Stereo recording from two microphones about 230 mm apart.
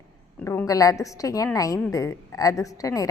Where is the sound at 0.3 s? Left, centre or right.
Centre.